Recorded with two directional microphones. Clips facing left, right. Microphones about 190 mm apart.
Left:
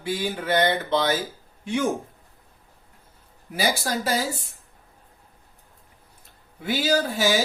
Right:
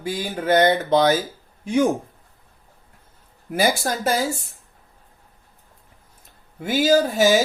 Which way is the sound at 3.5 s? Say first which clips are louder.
Right 4 dB; 50° right (ahead or behind).